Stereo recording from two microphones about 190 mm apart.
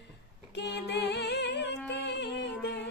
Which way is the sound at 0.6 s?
65° left (ahead or behind).